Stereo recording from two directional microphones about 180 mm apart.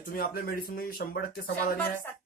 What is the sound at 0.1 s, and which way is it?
Speech, 55° left (ahead or behind).